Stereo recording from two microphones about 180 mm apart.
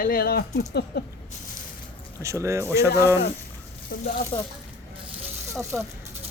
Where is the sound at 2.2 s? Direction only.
15° right (ahead or behind).